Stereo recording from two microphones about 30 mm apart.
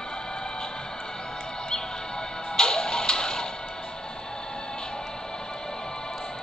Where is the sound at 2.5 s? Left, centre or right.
Left.